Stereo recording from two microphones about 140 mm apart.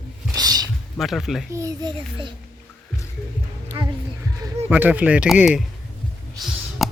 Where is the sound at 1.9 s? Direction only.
35° right (ahead or behind).